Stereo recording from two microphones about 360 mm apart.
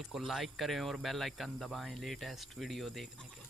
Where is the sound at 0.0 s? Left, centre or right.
Centre.